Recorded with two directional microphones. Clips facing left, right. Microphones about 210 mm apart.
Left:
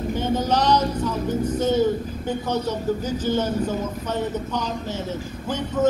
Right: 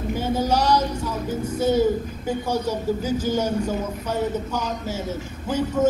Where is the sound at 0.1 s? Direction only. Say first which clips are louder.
Right 1 dB; 10° right (ahead or behind).